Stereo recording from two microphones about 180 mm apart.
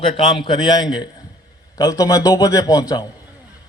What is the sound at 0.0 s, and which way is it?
A man's voice, 30° left (ahead or behind).